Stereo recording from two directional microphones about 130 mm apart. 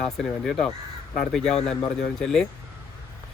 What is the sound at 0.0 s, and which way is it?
Speech, centre (ahead or behind).